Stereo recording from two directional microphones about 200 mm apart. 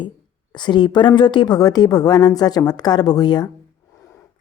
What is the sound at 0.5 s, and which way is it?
Speech, 20° left (ahead or behind).